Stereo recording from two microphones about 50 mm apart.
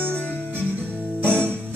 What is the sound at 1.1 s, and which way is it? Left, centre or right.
Music, right.